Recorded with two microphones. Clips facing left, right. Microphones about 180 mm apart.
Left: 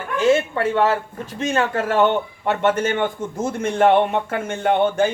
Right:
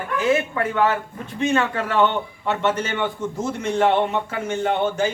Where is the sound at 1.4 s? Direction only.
40° left (ahead or behind).